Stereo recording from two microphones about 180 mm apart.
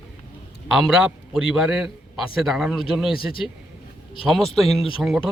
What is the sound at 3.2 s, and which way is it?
Speech, 30° left (ahead or behind).